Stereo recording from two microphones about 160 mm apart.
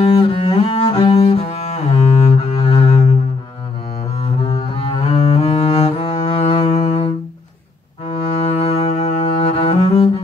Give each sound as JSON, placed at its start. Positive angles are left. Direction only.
{"t": 0.0, "sound": "cello", "side_deg": 30}
{"t": 4.2, "sound": "cello", "side_deg": 40}
{"t": 6.1, "sound": "music", "side_deg": 30}
{"t": 8.1, "sound": "cello", "side_deg": 40}